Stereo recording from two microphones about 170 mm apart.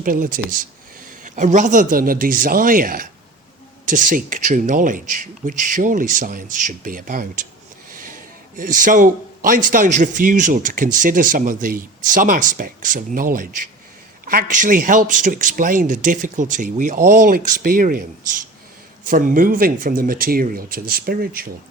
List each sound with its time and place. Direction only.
0.0 s speech: 55° right (ahead or behind)